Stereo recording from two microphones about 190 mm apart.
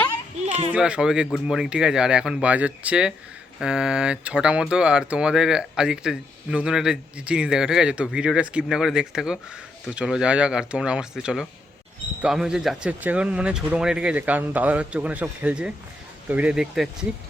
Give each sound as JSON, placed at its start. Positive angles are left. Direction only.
{"t": 0.4, "sound": "children playing", "side_deg": -35}
{"t": 0.7, "sound": "speech", "side_deg": -5}